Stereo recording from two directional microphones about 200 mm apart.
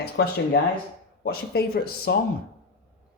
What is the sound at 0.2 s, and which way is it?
A woman's voice, 55° left (ahead or behind).